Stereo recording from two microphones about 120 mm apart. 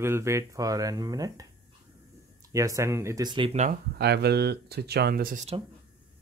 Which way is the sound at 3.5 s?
75° right (ahead or behind).